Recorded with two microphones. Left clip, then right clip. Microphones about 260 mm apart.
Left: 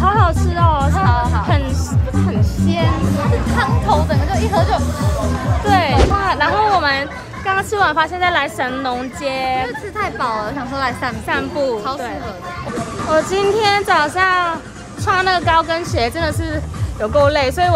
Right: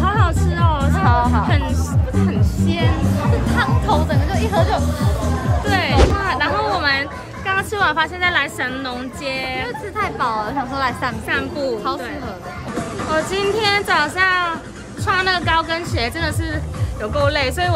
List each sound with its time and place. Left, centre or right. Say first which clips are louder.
0.0 s music: left 4 dB; centre
1.0 s music: right 1 dB; right
2.1 s music: left 1 dB; centre
3.5 s music: left 2 dB; centre
5.7 s a sound: left 3 dB; centre
9.9 s speech: even; centre
11.2 s speech: left 4 dB; centre
13.1 s speech: left 4 dB; centre